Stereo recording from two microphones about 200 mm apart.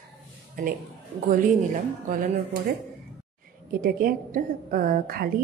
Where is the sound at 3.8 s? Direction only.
45° right (ahead or behind).